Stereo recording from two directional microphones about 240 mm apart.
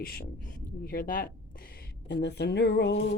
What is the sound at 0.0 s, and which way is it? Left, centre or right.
Speech, left.